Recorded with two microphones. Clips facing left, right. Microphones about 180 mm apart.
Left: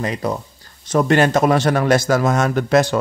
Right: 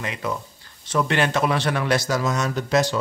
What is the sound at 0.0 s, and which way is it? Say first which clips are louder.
Speech: left 6 dB; 35° left (ahead or behind).